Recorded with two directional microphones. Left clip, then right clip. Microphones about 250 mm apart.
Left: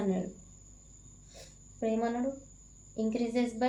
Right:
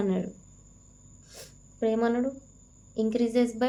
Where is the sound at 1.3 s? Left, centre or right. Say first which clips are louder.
Right 5 dB; right.